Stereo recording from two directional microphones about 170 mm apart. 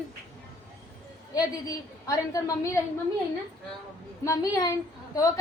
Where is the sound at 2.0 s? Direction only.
20° left (ahead or behind).